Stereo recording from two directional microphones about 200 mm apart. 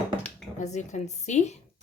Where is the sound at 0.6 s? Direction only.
35° left (ahead or behind).